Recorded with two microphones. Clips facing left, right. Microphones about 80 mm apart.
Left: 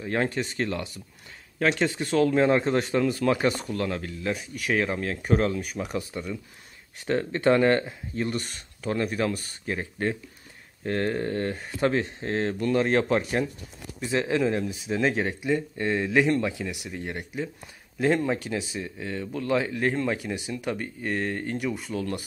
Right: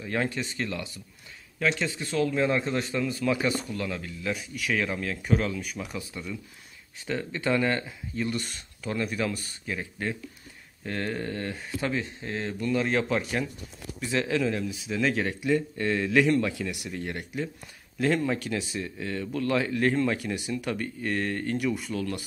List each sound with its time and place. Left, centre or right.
0.0 s speech: left
7.1 s speech: left